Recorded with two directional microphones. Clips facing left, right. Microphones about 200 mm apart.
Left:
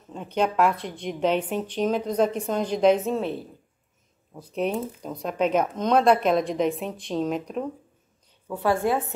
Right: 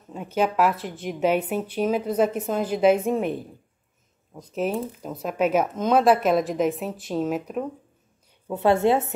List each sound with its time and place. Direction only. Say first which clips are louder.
0.1 s speech: right 1 dB; 5° right (ahead or behind)
4.3 s speech: even; centre (ahead or behind)
8.5 s a woman's voice: right 4 dB; 25° right (ahead or behind)